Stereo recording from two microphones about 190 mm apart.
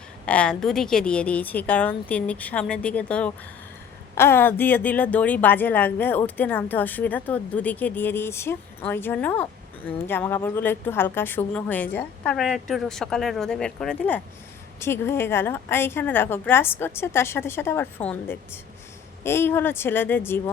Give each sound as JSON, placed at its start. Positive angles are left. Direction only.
{"t": 0.3, "sound": "a woman's voice", "side_deg": 5}